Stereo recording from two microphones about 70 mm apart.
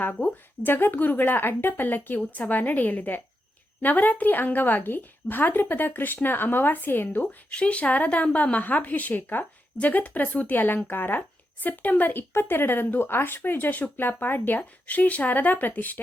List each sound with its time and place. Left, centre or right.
0.0 s speech: left